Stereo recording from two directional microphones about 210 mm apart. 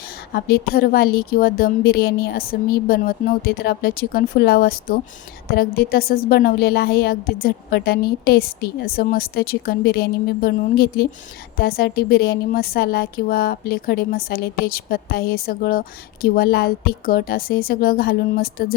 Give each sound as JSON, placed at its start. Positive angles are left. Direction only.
{"t": 0.3, "sound": "a woman's voice", "side_deg": 45}